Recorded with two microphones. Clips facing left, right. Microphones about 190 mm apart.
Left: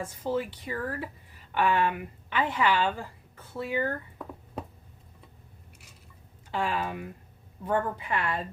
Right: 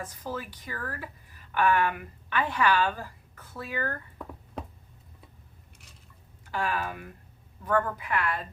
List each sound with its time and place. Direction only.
0.0 s a woman's voice: 25° left (ahead or behind)
6.5 s a woman's voice: 25° left (ahead or behind)